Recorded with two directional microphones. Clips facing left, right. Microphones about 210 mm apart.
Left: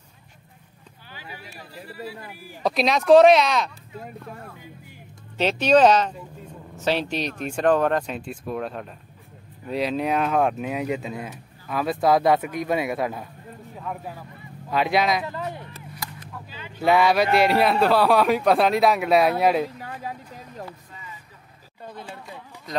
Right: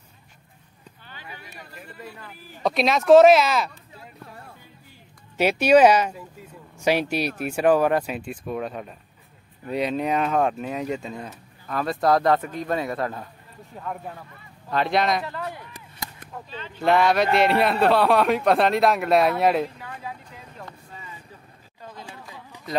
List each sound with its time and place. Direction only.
1.3 s a sound: 5° left (ahead or behind)
2.2 s speech: 10° left (ahead or behind)
2.7 s speech: centre (ahead or behind)
5.4 s speech: 10° right (ahead or behind)
15.2 s speech: 20° left (ahead or behind); by 19.7 s centre (ahead or behind)
19.8 s vehicle: 40° left (ahead or behind)